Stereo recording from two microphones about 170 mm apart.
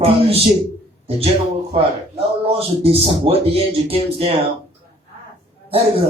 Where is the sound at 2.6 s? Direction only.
35° right (ahead or behind).